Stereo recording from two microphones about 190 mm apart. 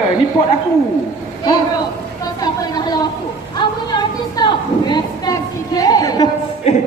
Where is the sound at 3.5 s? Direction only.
25° left (ahead or behind).